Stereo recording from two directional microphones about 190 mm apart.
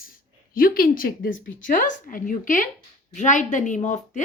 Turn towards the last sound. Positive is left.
turn(degrees=40)  # may be behind; listen again after turning